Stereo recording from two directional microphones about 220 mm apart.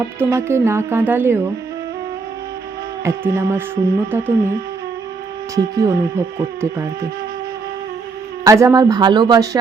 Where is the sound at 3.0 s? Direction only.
10° right (ahead or behind).